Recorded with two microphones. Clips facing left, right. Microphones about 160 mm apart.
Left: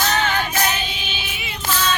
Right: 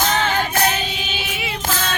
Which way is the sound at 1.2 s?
85° right.